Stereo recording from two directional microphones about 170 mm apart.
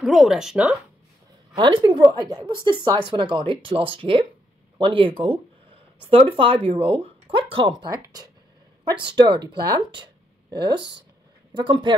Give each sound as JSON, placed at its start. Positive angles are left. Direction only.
{"t": 0.0, "sound": "speech", "side_deg": 0}
{"t": 1.5, "sound": "speech", "side_deg": -25}